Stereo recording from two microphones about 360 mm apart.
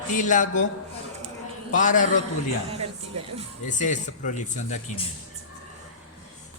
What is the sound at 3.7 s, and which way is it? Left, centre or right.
A man's voice, centre.